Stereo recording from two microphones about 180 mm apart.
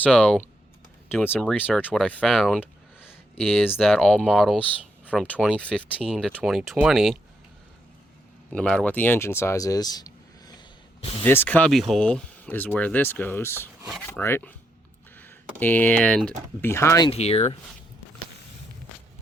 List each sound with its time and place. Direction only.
0.0 s speech: 5° left (ahead or behind)
2.1 s a sound: centre (ahead or behind)
3.8 s speech: centre (ahead or behind)
8.5 s speech: 5° left (ahead or behind); by 10.6 s 20° left (ahead or behind)
11.2 s speech: 10° left (ahead or behind)
17.1 s speech: 35° left (ahead or behind)